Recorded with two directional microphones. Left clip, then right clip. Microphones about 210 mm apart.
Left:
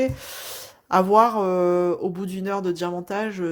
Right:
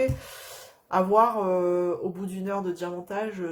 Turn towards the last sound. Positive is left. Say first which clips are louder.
# left 4 dB
turn(degrees=45)  # may be behind; listen again after turning